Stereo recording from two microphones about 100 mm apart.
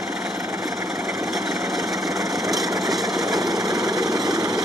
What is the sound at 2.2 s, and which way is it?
Engine, 40° right (ahead or behind).